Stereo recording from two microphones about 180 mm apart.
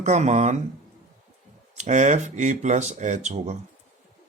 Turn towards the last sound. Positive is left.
turn(degrees=-40)  # may be behind; listen again after turning